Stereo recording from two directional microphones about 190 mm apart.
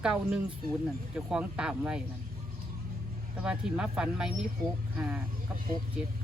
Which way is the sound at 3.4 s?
5° right (ahead or behind).